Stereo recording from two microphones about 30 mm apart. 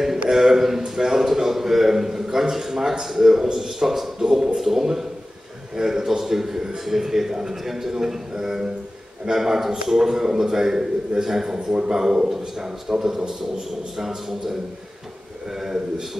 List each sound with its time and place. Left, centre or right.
0.3 s a man's voice: centre
13.9 s a man's voice: centre